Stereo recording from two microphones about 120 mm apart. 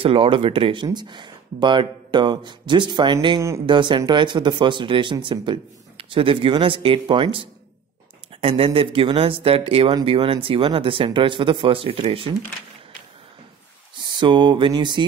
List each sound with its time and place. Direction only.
0.0 s speech: 50° right (ahead or behind)
0.8 s speech: 35° right (ahead or behind)
3.3 s speech: 25° right (ahead or behind)
3.6 s speech: 40° right (ahead or behind)
14.0 s speech: 40° right (ahead or behind)